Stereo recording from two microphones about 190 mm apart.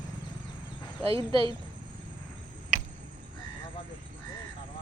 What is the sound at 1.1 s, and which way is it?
Speech, 30° right (ahead or behind).